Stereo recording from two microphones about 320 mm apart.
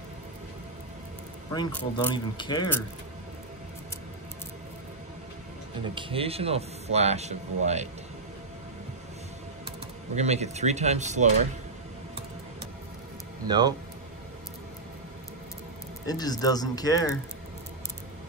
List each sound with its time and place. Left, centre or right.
1.5 s speech: centre
5.9 s speech: centre
9.7 s speech: right
13.5 s speech: centre
16.1 s speech: centre